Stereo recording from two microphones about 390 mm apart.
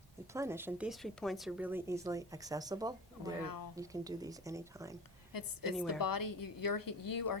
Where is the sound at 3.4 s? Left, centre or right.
Left.